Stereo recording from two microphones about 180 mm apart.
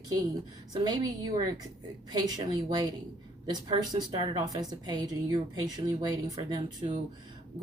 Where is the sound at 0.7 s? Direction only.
20° right (ahead or behind).